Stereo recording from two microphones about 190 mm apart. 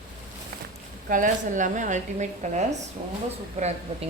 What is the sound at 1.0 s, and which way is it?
Speech, 45° right (ahead or behind).